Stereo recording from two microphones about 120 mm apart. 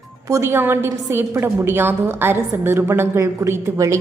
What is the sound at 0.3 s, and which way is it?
A woman's voice, 25° right (ahead or behind).